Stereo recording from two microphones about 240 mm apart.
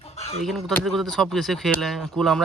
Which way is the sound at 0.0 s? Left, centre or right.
Left.